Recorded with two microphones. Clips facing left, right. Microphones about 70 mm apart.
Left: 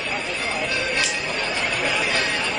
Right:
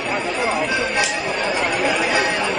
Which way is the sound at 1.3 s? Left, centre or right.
Centre.